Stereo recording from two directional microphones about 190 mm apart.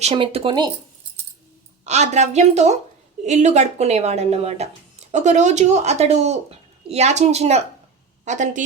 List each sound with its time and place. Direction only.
0.0 s speech: 30° right (ahead or behind)
1.8 s a woman's voice: 35° right (ahead or behind)